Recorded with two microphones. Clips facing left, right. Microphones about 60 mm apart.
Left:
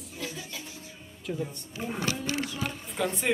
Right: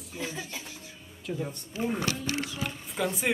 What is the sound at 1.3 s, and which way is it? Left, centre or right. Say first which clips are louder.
Speech: left 1 dB; centre.